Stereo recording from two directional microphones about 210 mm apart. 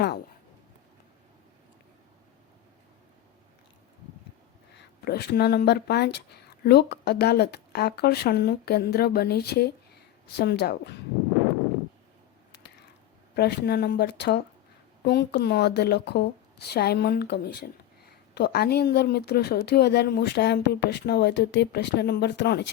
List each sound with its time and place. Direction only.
4.7 s speech: 50° left (ahead or behind)
13.3 s a woman's voice: 50° left (ahead or behind)